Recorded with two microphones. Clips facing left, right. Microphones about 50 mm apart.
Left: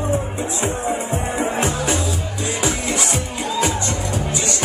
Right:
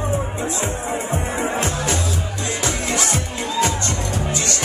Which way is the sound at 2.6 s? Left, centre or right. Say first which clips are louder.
Even; centre.